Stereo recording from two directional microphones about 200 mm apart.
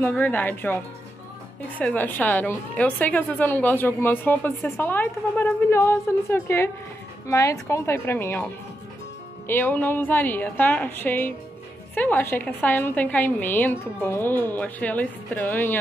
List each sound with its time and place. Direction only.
0.0 s a woman's voice: 10° left (ahead or behind)
1.8 s a woman's voice: 10° left (ahead or behind)
9.5 s a woman's voice: 10° left (ahead or behind)